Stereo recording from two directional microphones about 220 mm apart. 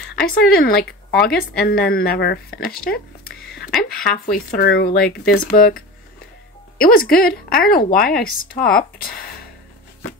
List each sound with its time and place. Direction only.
0.1 s a woman's voice: 40° left (ahead or behind)
4.0 s a woman's voice: 40° left (ahead or behind)